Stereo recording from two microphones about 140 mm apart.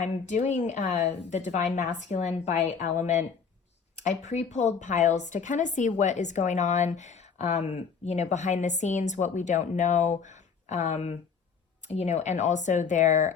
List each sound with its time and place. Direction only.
0.0 s speech: 55° left (ahead or behind)